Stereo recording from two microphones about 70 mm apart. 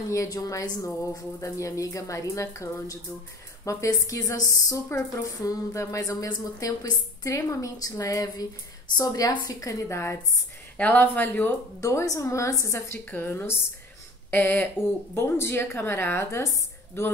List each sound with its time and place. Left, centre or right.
0.1 s a woman's voice: left
10.8 s speech: left
11.8 s a woman's voice: left
13.1 s speech: left